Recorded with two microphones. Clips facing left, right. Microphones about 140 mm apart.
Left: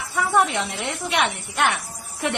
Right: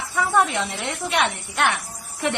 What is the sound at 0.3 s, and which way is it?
A woman's voice, 15° left (ahead or behind).